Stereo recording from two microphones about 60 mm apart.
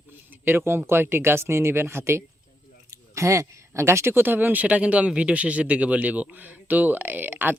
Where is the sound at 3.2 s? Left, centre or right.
Right.